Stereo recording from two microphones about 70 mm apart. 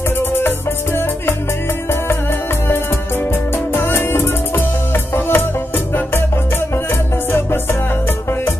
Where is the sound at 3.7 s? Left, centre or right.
Left.